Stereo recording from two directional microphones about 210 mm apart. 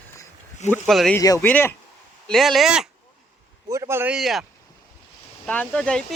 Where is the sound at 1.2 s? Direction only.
15° left (ahead or behind).